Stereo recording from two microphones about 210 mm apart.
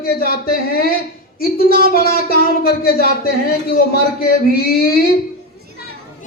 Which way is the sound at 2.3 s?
45° left (ahead or behind).